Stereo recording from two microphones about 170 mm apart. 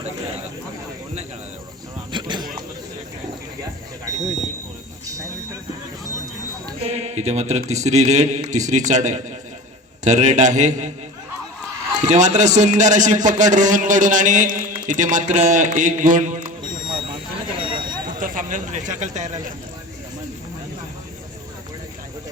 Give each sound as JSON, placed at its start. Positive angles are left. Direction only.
{"t": 2.1, "sound": "a sound", "side_deg": -25}
{"t": 6.8, "sound": "a man's voice", "side_deg": -40}
{"t": 11.9, "sound": "a man's voice", "side_deg": -45}
{"t": 16.7, "sound": "vehicle", "side_deg": -30}
{"t": 18.2, "sound": "speech", "side_deg": -50}